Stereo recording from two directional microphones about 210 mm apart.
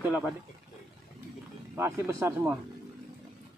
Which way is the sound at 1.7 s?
10° right (ahead or behind).